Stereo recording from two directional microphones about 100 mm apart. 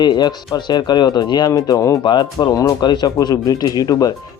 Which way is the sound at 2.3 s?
35° left (ahead or behind).